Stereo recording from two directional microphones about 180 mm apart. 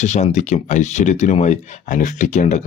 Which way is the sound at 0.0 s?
40° left (ahead or behind).